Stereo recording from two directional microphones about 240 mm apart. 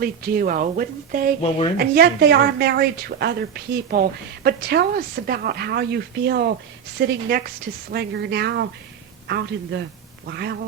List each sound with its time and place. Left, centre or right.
0.0 s a woman's voice: right